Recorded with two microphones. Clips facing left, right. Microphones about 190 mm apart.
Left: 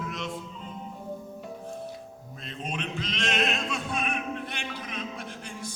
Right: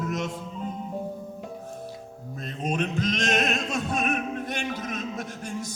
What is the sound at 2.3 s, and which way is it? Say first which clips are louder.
Music: right 7 dB; 45° right (ahead or behind).